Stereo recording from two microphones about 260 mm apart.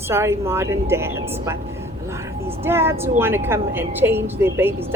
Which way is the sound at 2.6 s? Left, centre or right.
Centre.